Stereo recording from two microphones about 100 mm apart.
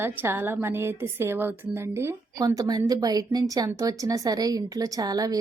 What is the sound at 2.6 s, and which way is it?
A woman's voice, 40° right (ahead or behind).